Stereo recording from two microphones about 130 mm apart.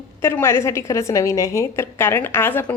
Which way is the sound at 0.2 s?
20° left (ahead or behind).